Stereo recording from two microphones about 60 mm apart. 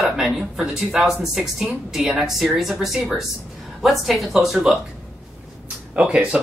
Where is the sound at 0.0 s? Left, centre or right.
Centre.